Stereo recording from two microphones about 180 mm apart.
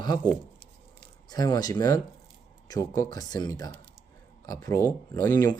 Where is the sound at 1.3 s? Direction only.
20° left (ahead or behind).